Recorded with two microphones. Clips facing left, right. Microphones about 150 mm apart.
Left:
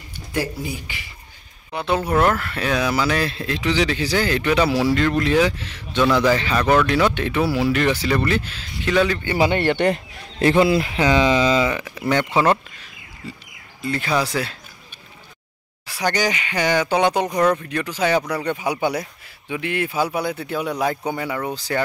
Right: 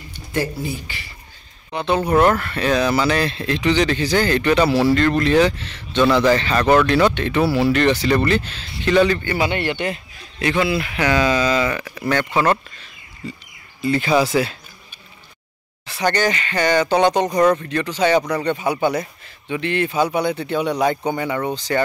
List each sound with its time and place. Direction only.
0.3 s speech: 10° left (ahead or behind)
9.7 s speech: 60° left (ahead or behind)
10.4 s speech: 30° left (ahead or behind)
13.8 s speech: centre (ahead or behind)
15.9 s speech: 10° left (ahead or behind)
17.4 s speech: 5° right (ahead or behind)
17.6 s speech: 5° left (ahead or behind)